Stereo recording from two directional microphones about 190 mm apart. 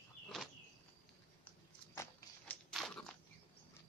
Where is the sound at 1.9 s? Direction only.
15° left (ahead or behind).